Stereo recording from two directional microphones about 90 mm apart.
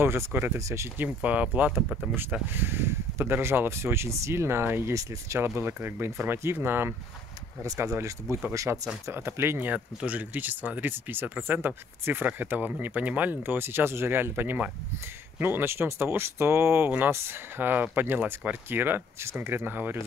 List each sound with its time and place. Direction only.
0.0 s speech: 25° right (ahead or behind)
0.9 s speech: 15° right (ahead or behind)
7.6 s speech: 35° right (ahead or behind)
8.7 s speech: 20° right (ahead or behind)
9.0 s speech: 30° right (ahead or behind)
9.7 s speech: 15° right (ahead or behind)